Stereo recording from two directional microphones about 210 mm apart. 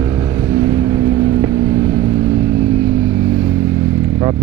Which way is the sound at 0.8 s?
15° right (ahead or behind).